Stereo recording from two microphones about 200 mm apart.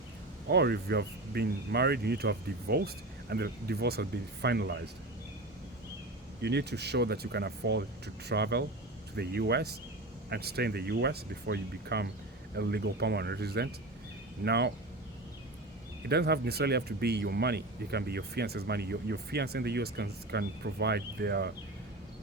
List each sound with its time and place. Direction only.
0.4 s speech: 55° right (ahead or behind)
6.4 s speech: 55° right (ahead or behind)
16.0 s speech: 55° right (ahead or behind)